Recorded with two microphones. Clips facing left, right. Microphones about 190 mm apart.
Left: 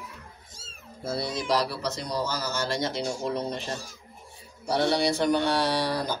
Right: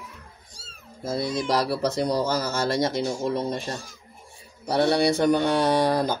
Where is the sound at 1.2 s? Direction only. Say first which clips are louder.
Right 2 dB; 55° right (ahead or behind).